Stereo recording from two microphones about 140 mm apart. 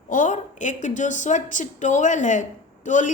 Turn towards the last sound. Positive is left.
turn(degrees=65)  # may be behind; listen again after turning